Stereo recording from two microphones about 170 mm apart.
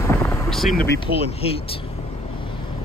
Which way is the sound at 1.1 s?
60° right (ahead or behind).